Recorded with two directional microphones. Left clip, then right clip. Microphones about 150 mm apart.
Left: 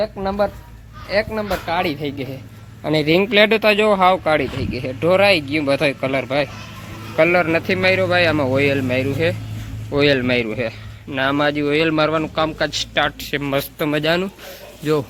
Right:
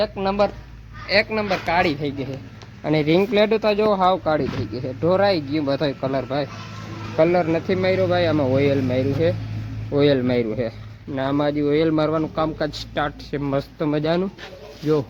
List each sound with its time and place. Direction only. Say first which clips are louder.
0.0 s speech: even; centre (ahead or behind)
1.0 s a man's voice: right 1 dB; 15° right (ahead or behind)
2.0 s speech: left 1 dB; centre (ahead or behind)
5.6 s speech: left 5 dB; 35° left (ahead or behind)
7.2 s a man's voice: left 3 dB; 5° right (ahead or behind)